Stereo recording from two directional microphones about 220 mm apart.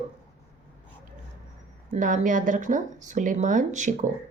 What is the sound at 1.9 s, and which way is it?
A woman's voice, 35° right (ahead or behind).